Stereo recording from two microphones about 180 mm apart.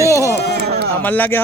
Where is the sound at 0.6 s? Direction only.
60° right (ahead or behind).